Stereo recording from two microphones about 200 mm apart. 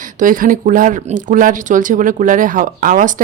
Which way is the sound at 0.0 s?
40° right (ahead or behind).